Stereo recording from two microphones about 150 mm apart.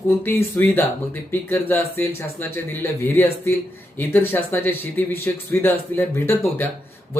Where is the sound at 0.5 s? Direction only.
15° left (ahead or behind).